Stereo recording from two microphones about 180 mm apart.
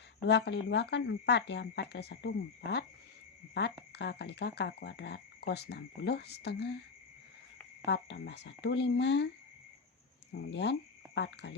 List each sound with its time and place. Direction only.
0.3 s speech: 70° left (ahead or behind)
7.9 s speech: 75° left (ahead or behind)
10.3 s speech: 75° left (ahead or behind)